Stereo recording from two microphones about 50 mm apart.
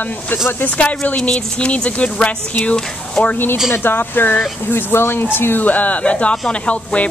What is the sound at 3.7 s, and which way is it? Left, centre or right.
Speech, left.